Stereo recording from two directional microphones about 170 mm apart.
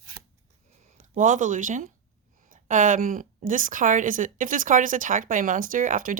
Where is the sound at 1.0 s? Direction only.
45° right (ahead or behind).